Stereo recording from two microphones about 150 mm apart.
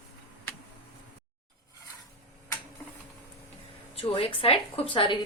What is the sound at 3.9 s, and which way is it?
A woman's voice, 40° left (ahead or behind).